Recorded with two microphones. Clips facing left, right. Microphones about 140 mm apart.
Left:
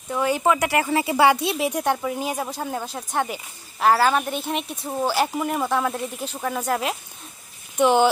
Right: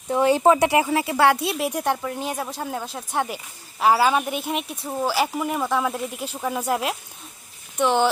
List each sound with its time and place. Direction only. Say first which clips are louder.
0.1 s speech: right 4 dB; 30° right (ahead or behind)
0.9 s speech: left 1 dB; centre (ahead or behind)